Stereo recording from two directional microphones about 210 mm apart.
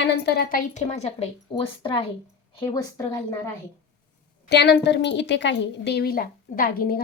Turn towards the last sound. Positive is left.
turn(degrees=45)  # may be behind; listen again after turning